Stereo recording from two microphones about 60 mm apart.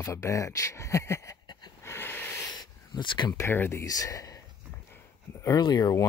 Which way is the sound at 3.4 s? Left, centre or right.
Left.